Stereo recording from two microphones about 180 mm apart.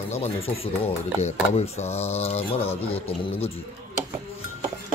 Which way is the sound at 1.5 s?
35° left (ahead or behind).